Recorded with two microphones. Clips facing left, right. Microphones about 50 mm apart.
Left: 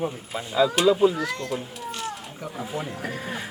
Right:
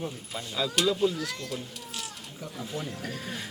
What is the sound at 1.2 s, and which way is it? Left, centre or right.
Speech, centre.